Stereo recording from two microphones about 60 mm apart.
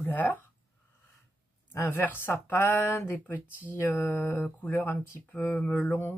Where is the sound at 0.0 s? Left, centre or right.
Left.